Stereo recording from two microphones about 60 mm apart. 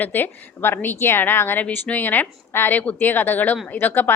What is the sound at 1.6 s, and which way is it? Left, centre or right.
A woman's voice, left.